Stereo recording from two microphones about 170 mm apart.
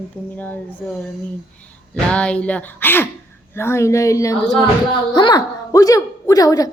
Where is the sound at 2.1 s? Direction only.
5° left (ahead or behind).